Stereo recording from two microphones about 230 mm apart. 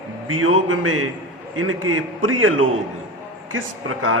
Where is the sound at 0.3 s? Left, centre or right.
Right.